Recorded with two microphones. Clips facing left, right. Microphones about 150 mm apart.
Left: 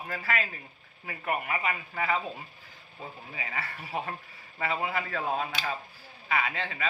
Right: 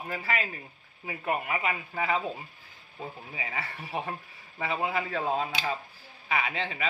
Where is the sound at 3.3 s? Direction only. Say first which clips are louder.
Left 2 dB; 20° right (ahead or behind).